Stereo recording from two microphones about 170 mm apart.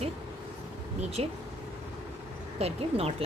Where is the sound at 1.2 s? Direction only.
35° right (ahead or behind).